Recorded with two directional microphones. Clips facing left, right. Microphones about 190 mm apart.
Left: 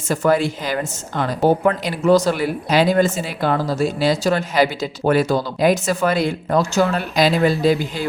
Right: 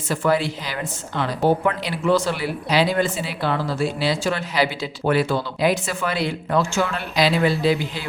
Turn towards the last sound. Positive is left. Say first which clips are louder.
# left 3 dB
turn(degrees=45)  # may be behind; listen again after turning